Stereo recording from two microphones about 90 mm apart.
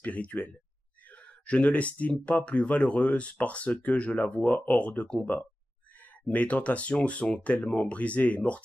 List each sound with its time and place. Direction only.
0.0 s speech: 15° left (ahead or behind)